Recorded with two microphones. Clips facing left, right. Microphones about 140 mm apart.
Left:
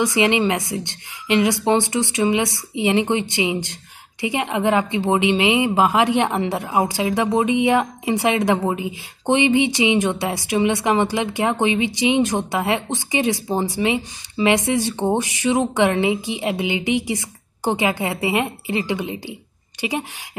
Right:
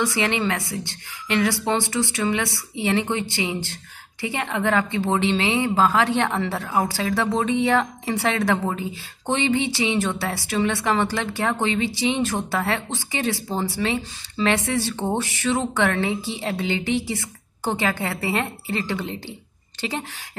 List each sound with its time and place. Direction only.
0.0 s a woman's voice: 15° left (ahead or behind)